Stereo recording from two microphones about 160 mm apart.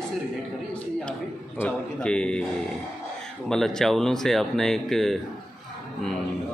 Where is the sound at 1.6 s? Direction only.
5° left (ahead or behind).